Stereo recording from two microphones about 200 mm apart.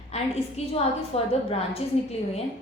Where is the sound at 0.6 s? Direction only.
30° left (ahead or behind).